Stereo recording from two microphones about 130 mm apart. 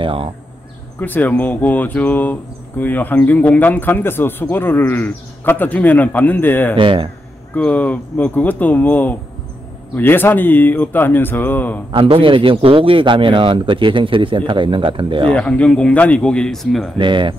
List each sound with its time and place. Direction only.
0.0 s a sound: 45° right (ahead or behind)
0.9 s speech: 15° left (ahead or behind)
6.8 s speech: 40° right (ahead or behind)
7.5 s speech: 10° left (ahead or behind)
11.9 s speech: 40° right (ahead or behind)
15.3 s speech: 10° left (ahead or behind)
17.0 s speech: 40° right (ahead or behind)